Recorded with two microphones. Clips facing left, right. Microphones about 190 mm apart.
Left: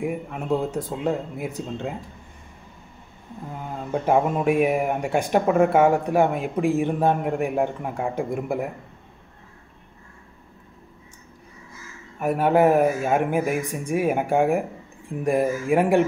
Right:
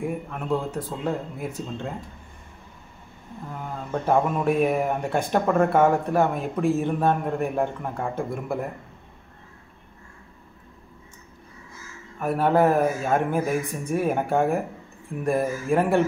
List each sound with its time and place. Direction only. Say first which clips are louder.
0.0 s speech: left 2 dB; 15° left (ahead or behind)
3.9 s speech: left 2 dB; 10° left (ahead or behind)
12.2 s speech: left 2 dB; 15° left (ahead or behind)